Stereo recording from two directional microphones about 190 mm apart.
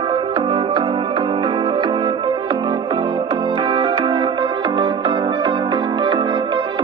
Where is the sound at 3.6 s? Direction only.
25° right (ahead or behind).